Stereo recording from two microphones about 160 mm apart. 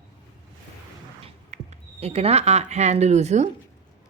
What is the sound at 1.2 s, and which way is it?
Speech, 40° right (ahead or behind).